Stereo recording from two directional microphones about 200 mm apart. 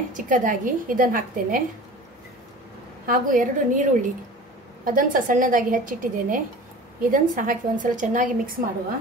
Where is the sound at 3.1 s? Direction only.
40° right (ahead or behind).